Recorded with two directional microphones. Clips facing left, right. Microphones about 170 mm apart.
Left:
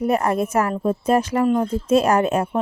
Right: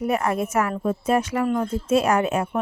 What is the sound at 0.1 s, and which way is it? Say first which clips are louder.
Speech: left 2 dB; 35° left (ahead or behind).